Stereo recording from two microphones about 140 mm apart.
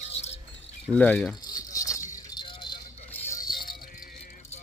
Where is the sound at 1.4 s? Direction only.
30° left (ahead or behind).